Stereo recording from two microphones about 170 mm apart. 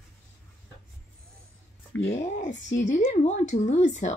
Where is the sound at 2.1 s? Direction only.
45° left (ahead or behind).